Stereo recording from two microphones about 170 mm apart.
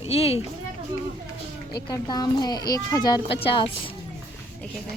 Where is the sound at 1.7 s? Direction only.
25° left (ahead or behind).